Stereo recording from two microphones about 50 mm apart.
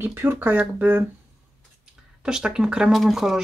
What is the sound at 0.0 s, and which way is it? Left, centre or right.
Speech, right.